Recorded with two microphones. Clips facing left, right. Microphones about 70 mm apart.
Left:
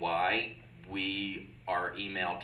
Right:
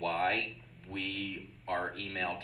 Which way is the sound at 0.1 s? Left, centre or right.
Left.